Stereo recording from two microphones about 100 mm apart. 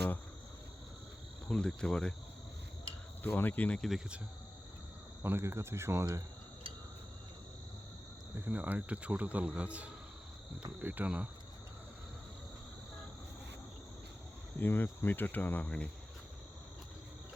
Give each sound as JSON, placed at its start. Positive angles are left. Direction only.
{"t": 1.5, "sound": "cricket", "side_deg": 10}
{"t": 3.2, "sound": "cricket", "side_deg": 20}
{"t": 3.8, "sound": "speech", "side_deg": 0}
{"t": 5.2, "sound": "speech", "side_deg": -25}
{"t": 8.4, "sound": "speech", "side_deg": -15}
{"t": 14.6, "sound": "cricket", "side_deg": 20}